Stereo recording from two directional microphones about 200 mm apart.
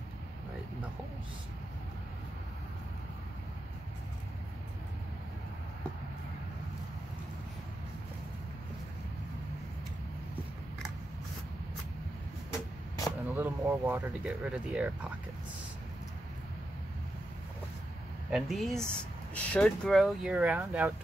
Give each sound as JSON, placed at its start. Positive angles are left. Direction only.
{"t": 13.3, "sound": "speech", "side_deg": -15}
{"t": 14.2, "sound": "speech", "side_deg": -5}
{"t": 18.3, "sound": "speech", "side_deg": 0}